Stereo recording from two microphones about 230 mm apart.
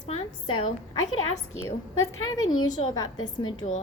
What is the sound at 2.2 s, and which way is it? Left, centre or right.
Speech, left.